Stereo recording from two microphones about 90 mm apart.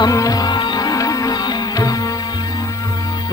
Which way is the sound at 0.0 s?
40° left (ahead or behind).